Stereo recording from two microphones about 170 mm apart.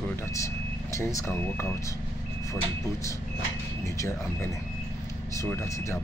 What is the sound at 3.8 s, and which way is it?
Speech, 15° left (ahead or behind).